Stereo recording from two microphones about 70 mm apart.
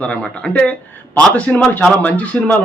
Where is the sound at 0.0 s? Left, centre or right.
Centre.